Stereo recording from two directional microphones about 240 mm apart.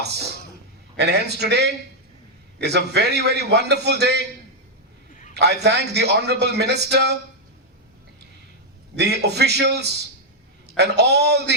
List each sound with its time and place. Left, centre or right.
0.9 s a man's voice: right
5.3 s a man's voice: right
9.0 s a man's voice: right